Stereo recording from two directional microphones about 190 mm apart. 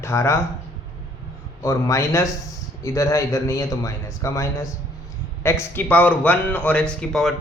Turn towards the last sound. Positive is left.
turn(degrees=0)  # may be behind; listen again after turning